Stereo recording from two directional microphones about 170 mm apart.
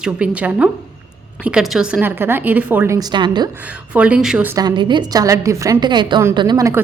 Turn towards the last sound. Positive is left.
turn(degrees=-20)  # may be behind; listen again after turning